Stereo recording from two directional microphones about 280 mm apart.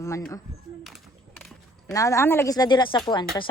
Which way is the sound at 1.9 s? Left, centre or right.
Centre.